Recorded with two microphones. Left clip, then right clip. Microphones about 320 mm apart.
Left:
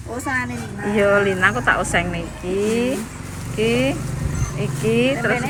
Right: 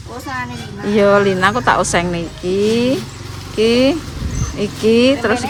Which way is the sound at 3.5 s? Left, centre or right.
Right.